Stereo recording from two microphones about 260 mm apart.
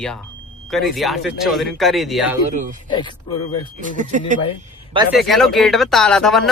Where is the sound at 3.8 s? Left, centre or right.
Right.